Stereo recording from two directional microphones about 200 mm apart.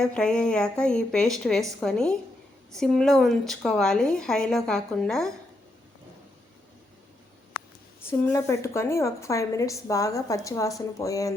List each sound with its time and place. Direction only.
0.0 s speech: 5° left (ahead or behind)
8.2 s a woman's voice: 15° left (ahead or behind)